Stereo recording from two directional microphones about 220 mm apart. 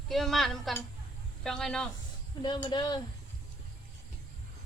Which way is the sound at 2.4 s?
20° left (ahead or behind).